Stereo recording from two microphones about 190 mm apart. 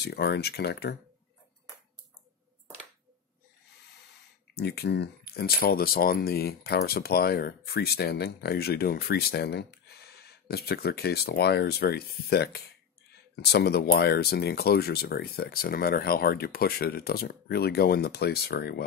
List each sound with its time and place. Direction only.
0.0 s speech: 60° left (ahead or behind)
4.6 s speech: 60° left (ahead or behind)